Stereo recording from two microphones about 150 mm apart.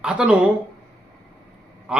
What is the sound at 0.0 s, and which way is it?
Speech, 5° right (ahead or behind).